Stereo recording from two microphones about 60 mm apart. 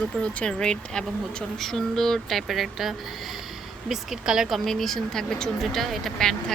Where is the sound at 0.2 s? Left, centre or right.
Centre.